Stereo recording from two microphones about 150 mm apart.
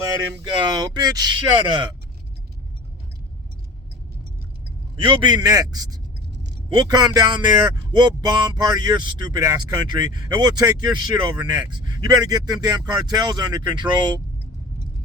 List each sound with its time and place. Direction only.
0.6 s speech: 30° right (ahead or behind)
4.9 s speech: 30° right (ahead or behind)